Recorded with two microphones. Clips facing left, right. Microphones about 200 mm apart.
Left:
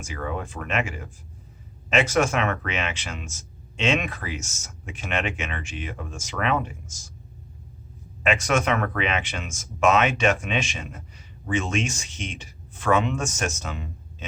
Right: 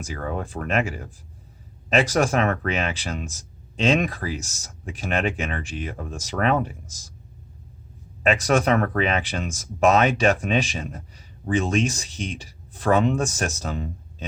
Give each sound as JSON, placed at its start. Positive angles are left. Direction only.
{"t": 0.0, "sound": "speech", "side_deg": -35}
{"t": 8.2, "sound": "speech", "side_deg": -35}